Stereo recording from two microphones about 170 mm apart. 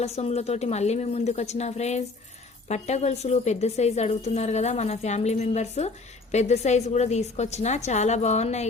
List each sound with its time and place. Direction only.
0.0 s a woman's voice: 40° left (ahead or behind)